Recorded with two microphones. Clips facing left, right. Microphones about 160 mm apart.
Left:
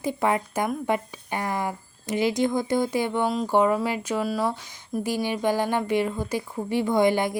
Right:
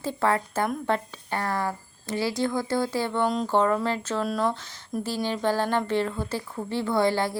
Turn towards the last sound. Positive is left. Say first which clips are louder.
# left 2 dB
turn(degrees=15)  # may be behind; listen again after turning